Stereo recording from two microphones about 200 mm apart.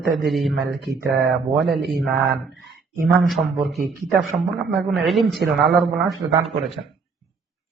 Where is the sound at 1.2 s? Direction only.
60° right (ahead or behind).